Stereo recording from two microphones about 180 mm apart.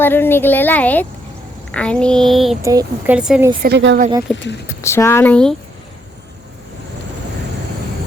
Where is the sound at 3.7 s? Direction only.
70° right (ahead or behind).